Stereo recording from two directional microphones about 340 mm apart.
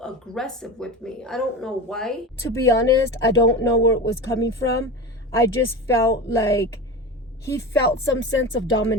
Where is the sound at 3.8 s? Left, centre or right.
Left.